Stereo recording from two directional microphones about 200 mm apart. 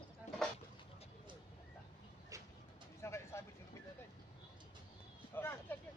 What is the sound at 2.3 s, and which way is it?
Bird, 15° right (ahead or behind).